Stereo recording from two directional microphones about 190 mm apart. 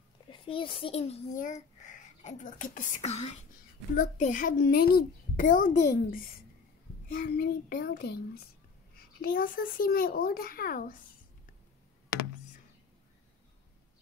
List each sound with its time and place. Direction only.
0.3 s a child's voice: 25° left (ahead or behind); by 11.0 s 45° left (ahead or behind)